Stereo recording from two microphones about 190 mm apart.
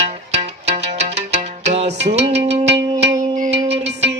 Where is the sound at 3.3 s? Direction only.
40° right (ahead or behind).